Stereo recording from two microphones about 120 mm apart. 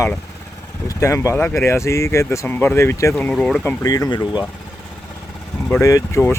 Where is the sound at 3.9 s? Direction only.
30° left (ahead or behind).